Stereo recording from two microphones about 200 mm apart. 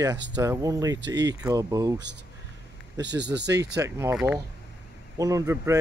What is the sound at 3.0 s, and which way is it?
Speech, 60° right (ahead or behind).